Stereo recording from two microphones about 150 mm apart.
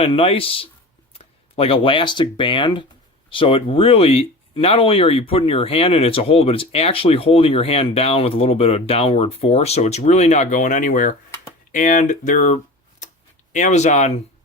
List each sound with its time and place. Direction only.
0.0 s speech: 40° left (ahead or behind)